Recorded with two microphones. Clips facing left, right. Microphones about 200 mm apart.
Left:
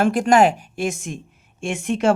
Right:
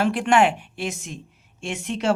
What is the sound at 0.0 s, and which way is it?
Speech, 45° left (ahead or behind).